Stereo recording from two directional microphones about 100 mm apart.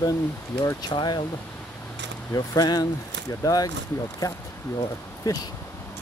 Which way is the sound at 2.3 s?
35° left (ahead or behind).